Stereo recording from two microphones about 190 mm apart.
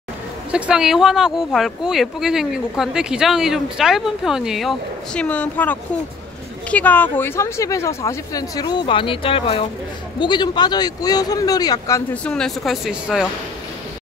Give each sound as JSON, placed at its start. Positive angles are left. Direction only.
{"t": 0.5, "sound": "speech", "side_deg": -5}
{"t": 12.1, "sound": "speech", "side_deg": 5}